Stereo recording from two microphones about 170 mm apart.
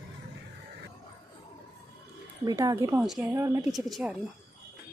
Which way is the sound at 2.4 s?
20° right (ahead or behind).